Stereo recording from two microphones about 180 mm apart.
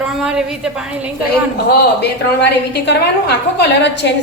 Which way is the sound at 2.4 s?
70° left (ahead or behind).